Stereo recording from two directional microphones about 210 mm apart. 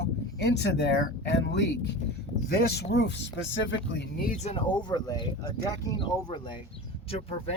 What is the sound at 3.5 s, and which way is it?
Speech, 60° left (ahead or behind).